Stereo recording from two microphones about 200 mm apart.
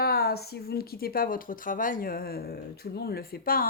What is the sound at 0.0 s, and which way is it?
Speech, 50° left (ahead or behind).